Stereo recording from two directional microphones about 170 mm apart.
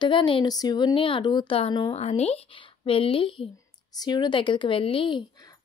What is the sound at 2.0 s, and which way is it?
A woman's voice, 40° left (ahead or behind).